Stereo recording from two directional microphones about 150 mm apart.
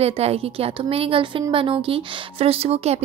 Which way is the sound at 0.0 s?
45° right (ahead or behind).